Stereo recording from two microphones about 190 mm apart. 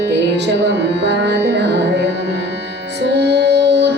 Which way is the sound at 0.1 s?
65° right (ahead or behind).